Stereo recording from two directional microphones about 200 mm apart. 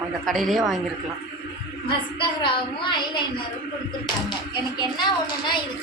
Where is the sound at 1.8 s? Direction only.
25° left (ahead or behind).